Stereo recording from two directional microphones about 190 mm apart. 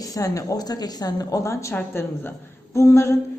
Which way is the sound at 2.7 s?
15° left (ahead or behind).